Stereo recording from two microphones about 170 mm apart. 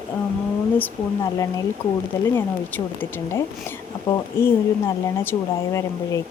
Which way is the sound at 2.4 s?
10° left (ahead or behind).